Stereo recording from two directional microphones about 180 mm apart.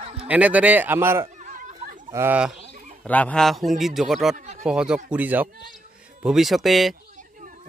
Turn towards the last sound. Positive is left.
turn(degrees=0)  # may be behind; listen again after turning